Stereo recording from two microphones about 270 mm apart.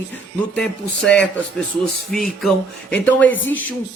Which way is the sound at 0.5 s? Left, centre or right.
Centre.